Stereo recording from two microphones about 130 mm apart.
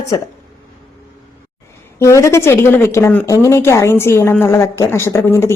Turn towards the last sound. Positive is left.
turn(degrees=20)  # may be behind; listen again after turning